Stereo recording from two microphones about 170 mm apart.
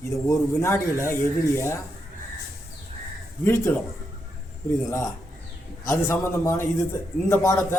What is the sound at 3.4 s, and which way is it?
Speech, 15° left (ahead or behind).